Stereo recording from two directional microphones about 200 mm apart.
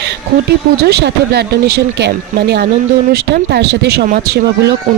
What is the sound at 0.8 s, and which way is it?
Speech, 55° right (ahead or behind).